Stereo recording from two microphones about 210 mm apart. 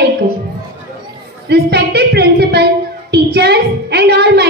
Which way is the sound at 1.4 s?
50° right (ahead or behind).